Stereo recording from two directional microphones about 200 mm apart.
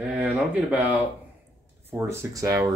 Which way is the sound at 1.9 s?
15° right (ahead or behind).